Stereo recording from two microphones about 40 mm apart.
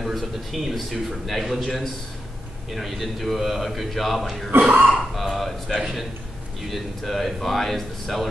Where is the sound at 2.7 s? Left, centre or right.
Centre.